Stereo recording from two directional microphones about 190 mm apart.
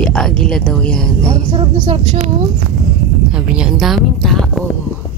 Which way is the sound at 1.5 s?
30° right (ahead or behind).